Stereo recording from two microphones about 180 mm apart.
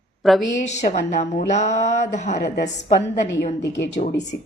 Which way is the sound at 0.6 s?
40° left (ahead or behind).